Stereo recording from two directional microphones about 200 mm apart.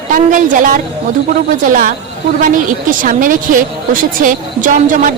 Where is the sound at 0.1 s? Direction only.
40° right (ahead or behind).